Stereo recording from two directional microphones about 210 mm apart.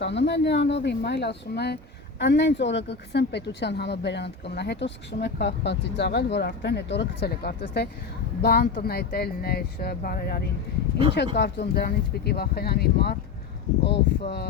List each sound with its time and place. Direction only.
0.0 s speech: 55° left (ahead or behind)